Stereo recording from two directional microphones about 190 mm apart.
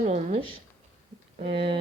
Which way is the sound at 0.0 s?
35° right (ahead or behind).